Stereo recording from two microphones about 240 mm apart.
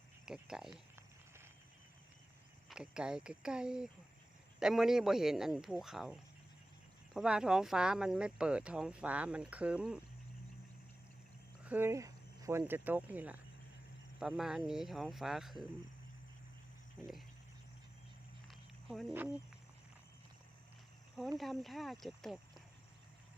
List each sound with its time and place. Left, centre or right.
0.3 s speech: centre
0.7 s a sound: centre
2.6 s speech: centre
11.6 s speech: centre
17.0 s speech: centre
18.4 s a sound: centre
21.3 s speech: centre